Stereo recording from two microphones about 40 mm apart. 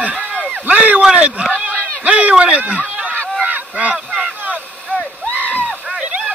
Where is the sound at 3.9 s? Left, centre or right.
Centre.